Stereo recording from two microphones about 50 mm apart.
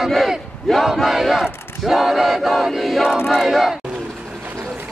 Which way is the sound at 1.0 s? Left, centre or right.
Centre.